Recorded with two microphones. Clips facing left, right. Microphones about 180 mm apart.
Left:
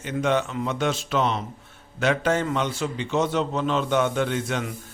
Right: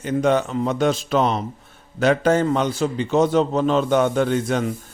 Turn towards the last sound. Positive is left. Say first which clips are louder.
# right 6 dB
turn(degrees=-40)  # may be behind; listen again after turning